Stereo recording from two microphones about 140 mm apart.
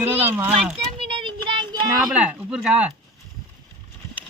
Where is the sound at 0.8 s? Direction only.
40° right (ahead or behind).